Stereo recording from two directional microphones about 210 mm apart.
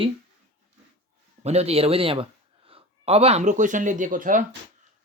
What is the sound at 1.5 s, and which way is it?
Speech, 30° right (ahead or behind).